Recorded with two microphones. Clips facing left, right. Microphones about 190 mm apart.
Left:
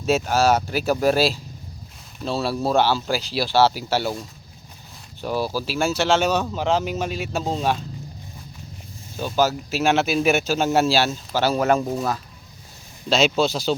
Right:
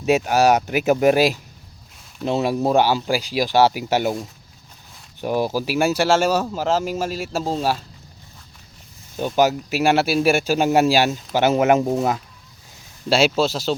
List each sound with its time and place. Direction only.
0.0 s speech: 15° right (ahead or behind)
5.2 s speech: 15° right (ahead or behind)
9.2 s speech: 15° right (ahead or behind)
13.1 s speech: 10° right (ahead or behind)